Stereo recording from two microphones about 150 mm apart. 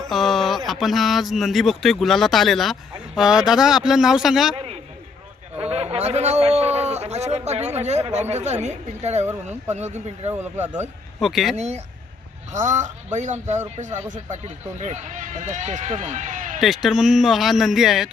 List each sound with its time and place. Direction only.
0.1 s a sound: centre (ahead or behind)
0.7 s speech: centre (ahead or behind)
4.5 s a sound: 40° right (ahead or behind)
9.6 s a man's voice: 45° right (ahead or behind)
11.2 s speech: centre (ahead or behind)
11.5 s a man's voice: 50° right (ahead or behind)
16.6 s speech: centre (ahead or behind)